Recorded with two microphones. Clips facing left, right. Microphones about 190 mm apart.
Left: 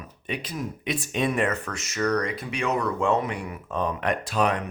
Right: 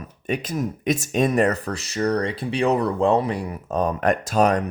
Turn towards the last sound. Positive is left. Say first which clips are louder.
# right 5 dB
turn(degrees=-45)  # may be behind; listen again after turning